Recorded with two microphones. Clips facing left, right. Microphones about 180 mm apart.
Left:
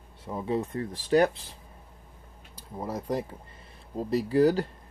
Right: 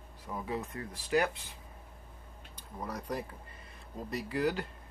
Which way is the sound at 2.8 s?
25° left (ahead or behind).